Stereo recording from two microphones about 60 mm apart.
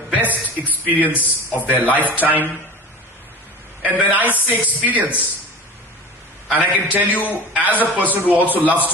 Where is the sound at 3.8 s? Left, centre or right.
Right.